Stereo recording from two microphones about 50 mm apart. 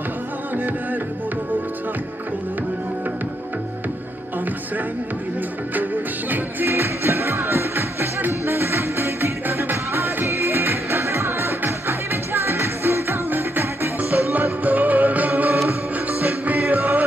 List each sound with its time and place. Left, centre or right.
6.3 s music: right
14.1 s music: right